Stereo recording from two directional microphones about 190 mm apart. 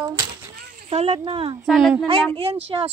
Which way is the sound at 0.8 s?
35° right (ahead or behind).